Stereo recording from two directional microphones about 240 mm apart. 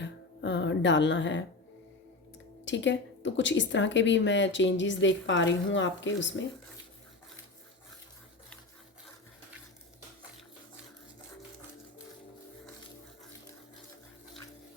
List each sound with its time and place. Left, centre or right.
0.0 s speech: left
2.6 s speech: left